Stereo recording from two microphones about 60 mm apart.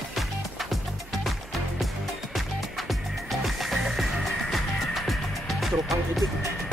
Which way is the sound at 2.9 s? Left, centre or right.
Centre.